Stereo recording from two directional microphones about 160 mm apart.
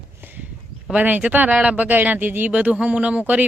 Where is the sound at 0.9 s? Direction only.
10° right (ahead or behind).